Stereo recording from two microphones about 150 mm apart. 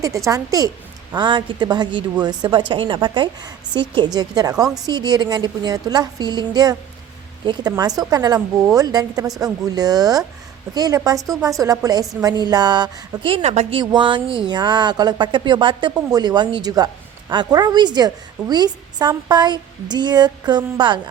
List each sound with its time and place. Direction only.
0.3 s a woman's voice: 25° right (ahead or behind)